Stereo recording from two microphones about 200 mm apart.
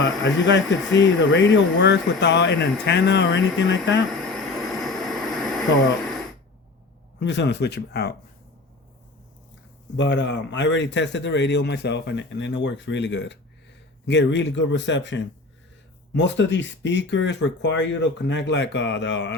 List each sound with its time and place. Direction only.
0.0 s a man's voice: 65° left (ahead or behind)
4.1 s a sound: centre (ahead or behind)
7.2 s a man's voice: 60° left (ahead or behind)
10.0 s a man's voice: 60° left (ahead or behind)